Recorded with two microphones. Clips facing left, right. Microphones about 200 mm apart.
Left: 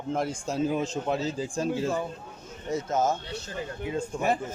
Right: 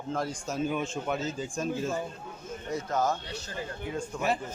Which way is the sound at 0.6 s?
35° left (ahead or behind).